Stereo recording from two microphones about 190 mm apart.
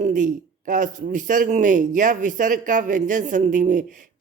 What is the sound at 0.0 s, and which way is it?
A man's voice, 40° right (ahead or behind).